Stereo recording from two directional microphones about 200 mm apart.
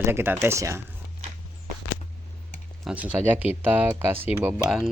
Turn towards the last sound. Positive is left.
turn(degrees=-5)  # may be behind; listen again after turning